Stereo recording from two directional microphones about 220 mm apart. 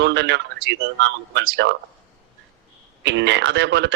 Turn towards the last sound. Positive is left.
turn(degrees=-55)  # may be behind; listen again after turning